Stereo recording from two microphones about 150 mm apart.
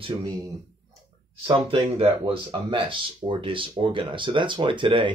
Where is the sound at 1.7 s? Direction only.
40° right (ahead or behind).